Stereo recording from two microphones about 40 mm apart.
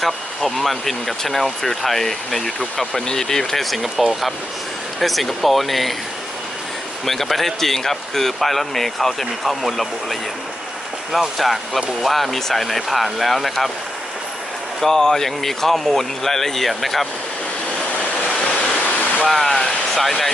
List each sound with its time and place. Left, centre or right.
0.0 s speech: centre
7.0 s speech: centre
11.3 s speech: centre
14.8 s speech: centre
18.9 s waterfall: left
19.2 s speech: centre